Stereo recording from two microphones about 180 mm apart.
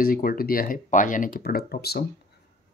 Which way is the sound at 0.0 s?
55° left (ahead or behind).